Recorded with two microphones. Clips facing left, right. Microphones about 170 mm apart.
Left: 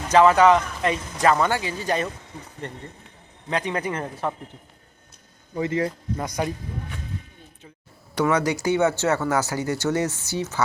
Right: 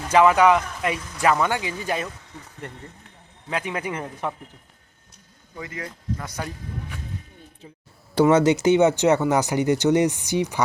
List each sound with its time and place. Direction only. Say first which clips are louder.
0.1 s speech: left 1 dB; 10° right (ahead or behind)
5.5 s speech: left 11 dB; 30° left (ahead or behind)
6.2 s speech: left 10 dB; 15° left (ahead or behind)
8.1 s speech: right 5 dB; 30° right (ahead or behind)